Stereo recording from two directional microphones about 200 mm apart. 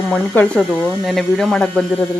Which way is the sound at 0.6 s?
5° right (ahead or behind).